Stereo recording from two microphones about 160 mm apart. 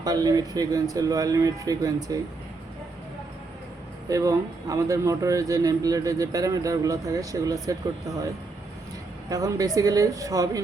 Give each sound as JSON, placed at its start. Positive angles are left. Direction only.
{"t": 0.0, "sound": "a man's voice", "side_deg": -25}
{"t": 4.1, "sound": "a man's voice", "side_deg": -20}
{"t": 9.3, "sound": "a man's voice", "side_deg": -20}